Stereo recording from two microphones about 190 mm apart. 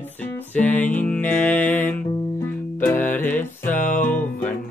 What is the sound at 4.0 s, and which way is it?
Music, 10° left (ahead or behind).